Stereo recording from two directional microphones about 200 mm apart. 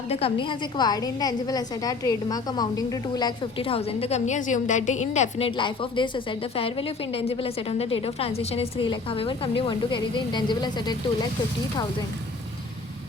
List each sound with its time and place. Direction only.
0.1 s a woman's voice: 30° left (ahead or behind)